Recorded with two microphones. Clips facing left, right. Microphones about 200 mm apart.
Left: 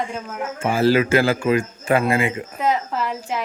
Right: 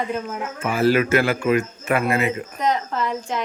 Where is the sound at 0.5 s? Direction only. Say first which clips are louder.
Left 1 dB; 30° left (ahead or behind).